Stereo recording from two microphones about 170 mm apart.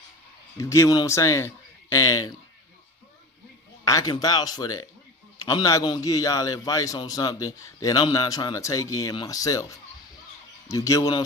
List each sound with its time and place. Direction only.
0.5 s a man's voice: 20° left (ahead or behind)
3.8 s a man's voice: 20° left (ahead or behind)